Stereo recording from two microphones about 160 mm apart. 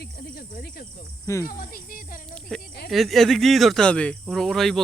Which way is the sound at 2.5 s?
5° left (ahead or behind).